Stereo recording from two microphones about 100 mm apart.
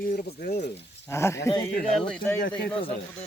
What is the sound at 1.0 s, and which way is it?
Speech, 30° left (ahead or behind).